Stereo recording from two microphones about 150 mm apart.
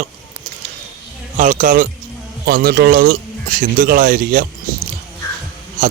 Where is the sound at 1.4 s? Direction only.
55° right (ahead or behind).